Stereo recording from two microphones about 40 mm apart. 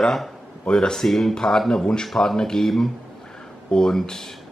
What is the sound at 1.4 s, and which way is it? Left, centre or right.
Speech, centre.